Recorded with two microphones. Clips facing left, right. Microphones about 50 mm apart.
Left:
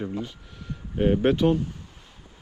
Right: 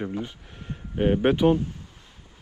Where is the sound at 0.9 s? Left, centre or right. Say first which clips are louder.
Even; centre.